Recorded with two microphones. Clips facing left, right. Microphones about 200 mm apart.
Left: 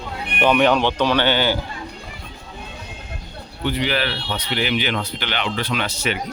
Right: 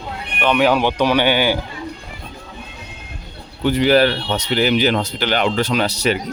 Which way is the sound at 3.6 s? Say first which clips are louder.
Right 8 dB; 45° right (ahead or behind).